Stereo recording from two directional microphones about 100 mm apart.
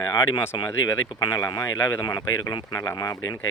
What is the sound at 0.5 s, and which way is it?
Speech, 50° left (ahead or behind).